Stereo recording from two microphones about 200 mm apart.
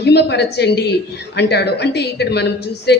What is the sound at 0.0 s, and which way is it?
Speech, 55° left (ahead or behind).